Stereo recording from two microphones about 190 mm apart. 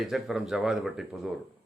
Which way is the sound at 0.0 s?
Centre (ahead or behind).